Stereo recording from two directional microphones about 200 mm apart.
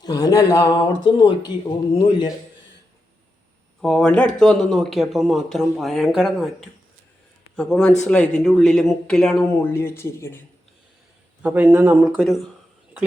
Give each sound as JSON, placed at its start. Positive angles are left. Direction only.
{"t": 0.0, "sound": "speech", "side_deg": 20}
{"t": 3.8, "sound": "a man's voice", "side_deg": 0}
{"t": 11.4, "sound": "speech", "side_deg": -10}